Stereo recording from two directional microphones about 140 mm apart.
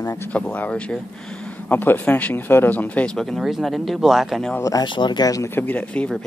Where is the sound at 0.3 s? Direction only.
10° left (ahead or behind).